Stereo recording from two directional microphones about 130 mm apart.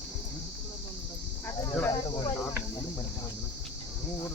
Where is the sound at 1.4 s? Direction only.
25° left (ahead or behind).